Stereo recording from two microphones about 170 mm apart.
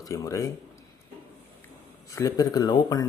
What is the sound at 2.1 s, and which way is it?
Speech, 20° left (ahead or behind).